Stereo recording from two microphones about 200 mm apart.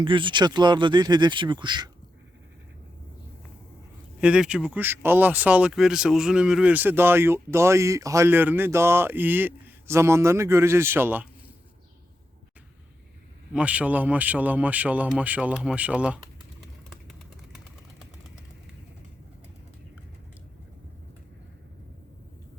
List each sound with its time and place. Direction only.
0.0 s speech: 25° right (ahead or behind)
4.2 s speech: 5° right (ahead or behind)
13.5 s speech: 5° right (ahead or behind)
16.9 s vehicle: centre (ahead or behind)